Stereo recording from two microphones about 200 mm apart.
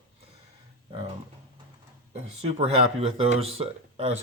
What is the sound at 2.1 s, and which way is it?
Speech, 30° right (ahead or behind).